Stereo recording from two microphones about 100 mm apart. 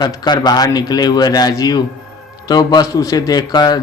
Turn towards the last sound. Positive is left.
turn(degrees=45)  # may be behind; listen again after turning